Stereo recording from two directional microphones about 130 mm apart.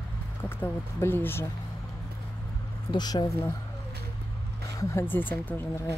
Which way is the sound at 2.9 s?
35° left (ahead or behind).